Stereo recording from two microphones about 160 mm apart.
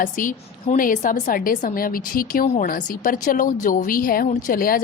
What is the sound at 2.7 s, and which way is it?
Speech, 60° left (ahead or behind).